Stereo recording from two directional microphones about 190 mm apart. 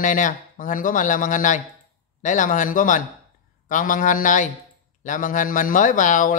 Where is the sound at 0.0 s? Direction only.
45° left (ahead or behind).